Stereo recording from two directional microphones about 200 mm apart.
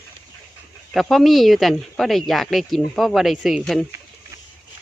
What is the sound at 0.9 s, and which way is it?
Speech, centre (ahead or behind).